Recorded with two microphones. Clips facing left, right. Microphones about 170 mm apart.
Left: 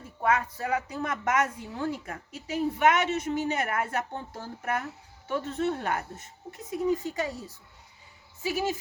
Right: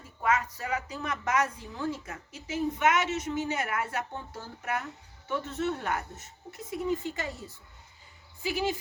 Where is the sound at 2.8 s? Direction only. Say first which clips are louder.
Left 3 dB; 60° left (ahead or behind).